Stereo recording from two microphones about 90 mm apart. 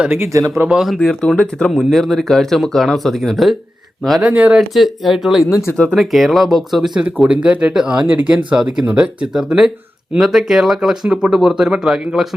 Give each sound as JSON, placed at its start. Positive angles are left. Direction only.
{"t": 0.2, "sound": "speech", "side_deg": -35}
{"t": 0.6, "sound": "speech", "side_deg": -10}
{"t": 0.9, "sound": "speech", "side_deg": 5}
{"t": 4.2, "sound": "speech", "side_deg": -15}
{"t": 4.5, "sound": "speech", "side_deg": 0}
{"t": 5.7, "sound": "speech", "side_deg": 10}
{"t": 6.0, "sound": "speech", "side_deg": 0}